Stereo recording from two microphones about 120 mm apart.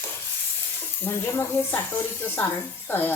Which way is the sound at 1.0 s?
20° left (ahead or behind).